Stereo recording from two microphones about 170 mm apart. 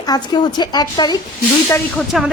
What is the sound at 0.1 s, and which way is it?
A woman's voice, 25° left (ahead or behind).